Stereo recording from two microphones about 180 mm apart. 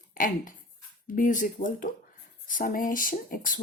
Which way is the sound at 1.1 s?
45° left (ahead or behind).